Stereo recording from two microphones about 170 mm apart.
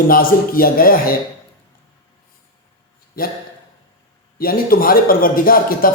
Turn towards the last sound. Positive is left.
turn(degrees=60)  # may be behind; listen again after turning